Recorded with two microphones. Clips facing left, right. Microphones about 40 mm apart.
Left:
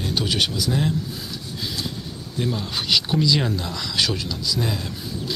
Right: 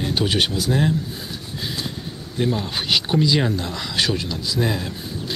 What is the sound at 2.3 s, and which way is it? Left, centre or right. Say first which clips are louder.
Speech: right 3 dB; centre.